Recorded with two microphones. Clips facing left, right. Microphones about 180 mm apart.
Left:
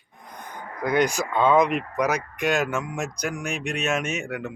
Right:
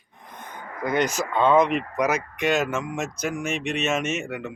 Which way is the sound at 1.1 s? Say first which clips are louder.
Right 3 dB; centre (ahead or behind).